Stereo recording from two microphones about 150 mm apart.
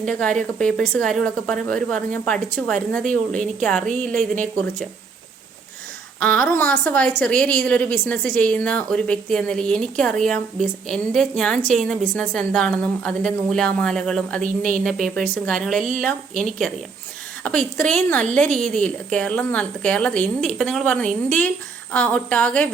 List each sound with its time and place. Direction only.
0.0 s a woman's voice: 5° left (ahead or behind)
6.1 s a woman's voice: 10° left (ahead or behind)
14.4 s speech: 65° right (ahead or behind)
14.8 s a woman's voice: 5° left (ahead or behind)